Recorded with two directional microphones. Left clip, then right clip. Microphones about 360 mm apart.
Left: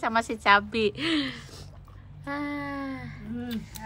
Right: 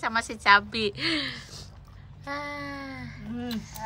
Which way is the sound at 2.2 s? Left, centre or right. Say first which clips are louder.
Left 1 dB; centre.